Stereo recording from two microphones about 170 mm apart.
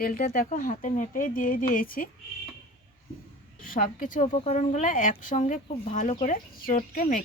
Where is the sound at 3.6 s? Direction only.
55° left (ahead or behind).